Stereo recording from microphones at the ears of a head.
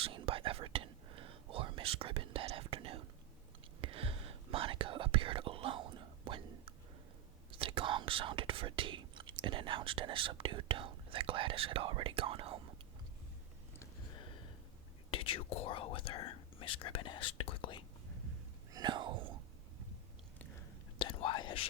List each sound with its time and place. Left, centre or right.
0.0 s whispering: right
7.5 s speech: right
14.1 s a sound: left
15.1 s speech: left
18.1 s whispering: right
21.0 s whispering: left